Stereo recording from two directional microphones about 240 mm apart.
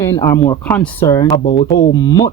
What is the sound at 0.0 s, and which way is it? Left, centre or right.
Speech, centre.